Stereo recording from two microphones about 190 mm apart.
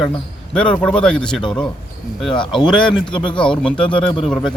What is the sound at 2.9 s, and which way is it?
Speech, 5° left (ahead or behind).